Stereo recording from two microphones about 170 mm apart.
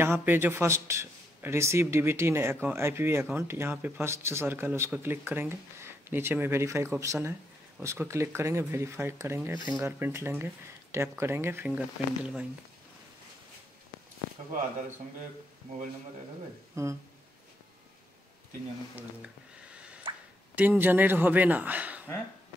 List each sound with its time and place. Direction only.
0.0 s speech: 15° right (ahead or behind)
16.8 s speech: 15° right (ahead or behind)
18.9 s a sound: 5° right (ahead or behind)
20.5 s speech: 10° right (ahead or behind)